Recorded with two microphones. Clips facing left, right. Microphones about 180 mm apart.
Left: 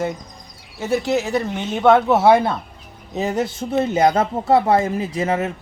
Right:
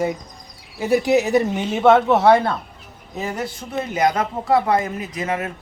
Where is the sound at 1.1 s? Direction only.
20° right (ahead or behind).